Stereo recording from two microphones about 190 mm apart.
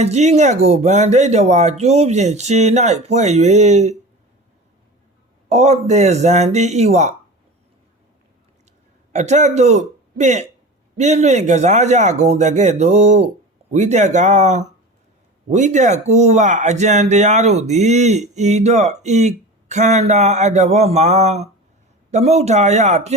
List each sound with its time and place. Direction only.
0.0 s speech: 35° right (ahead or behind)
5.5 s speech: 35° right (ahead or behind)
9.1 s speech: 35° right (ahead or behind)